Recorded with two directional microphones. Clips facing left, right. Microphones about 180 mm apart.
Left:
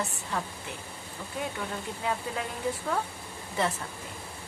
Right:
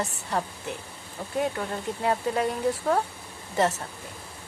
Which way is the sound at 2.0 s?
45° right (ahead or behind).